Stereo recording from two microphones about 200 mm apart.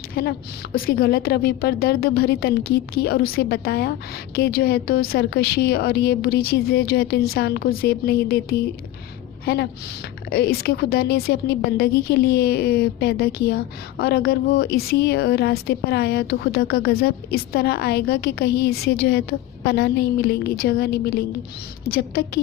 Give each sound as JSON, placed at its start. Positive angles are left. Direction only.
{"t": 0.1, "sound": "a woman's voice", "side_deg": 50}